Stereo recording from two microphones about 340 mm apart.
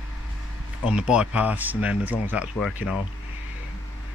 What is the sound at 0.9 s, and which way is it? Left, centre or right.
Speech, centre.